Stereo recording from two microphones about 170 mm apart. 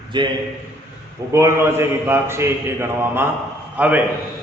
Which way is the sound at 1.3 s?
15° right (ahead or behind).